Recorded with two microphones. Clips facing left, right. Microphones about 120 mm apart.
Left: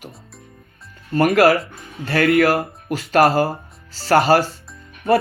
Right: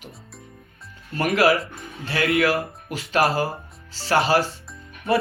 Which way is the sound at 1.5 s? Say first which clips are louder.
Left 3 dB; centre (ahead or behind).